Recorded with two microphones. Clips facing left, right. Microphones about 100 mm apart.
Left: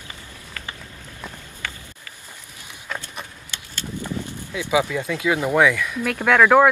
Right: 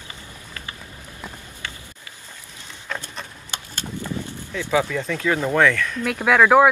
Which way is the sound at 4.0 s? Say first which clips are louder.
Left 1 dB; 15° left (ahead or behind).